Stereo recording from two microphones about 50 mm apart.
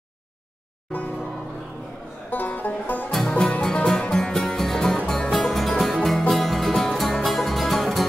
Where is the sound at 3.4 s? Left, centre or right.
Centre.